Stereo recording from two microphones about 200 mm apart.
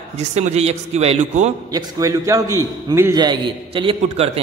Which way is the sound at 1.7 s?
15° right (ahead or behind).